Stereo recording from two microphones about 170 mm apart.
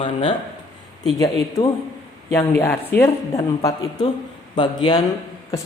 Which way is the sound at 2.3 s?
15° left (ahead or behind).